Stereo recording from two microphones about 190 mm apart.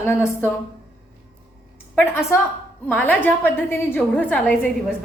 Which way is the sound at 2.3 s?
15° left (ahead or behind).